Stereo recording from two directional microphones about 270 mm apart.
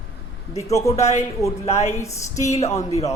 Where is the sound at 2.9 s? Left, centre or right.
Left.